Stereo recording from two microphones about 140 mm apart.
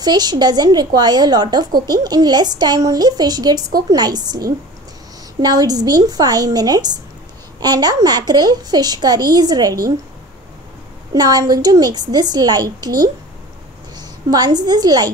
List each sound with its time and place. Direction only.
0.0 s a child's voice: 30° right (ahead or behind)
5.4 s a child's voice: 25° right (ahead or behind)
11.1 s a child's voice: 25° right (ahead or behind)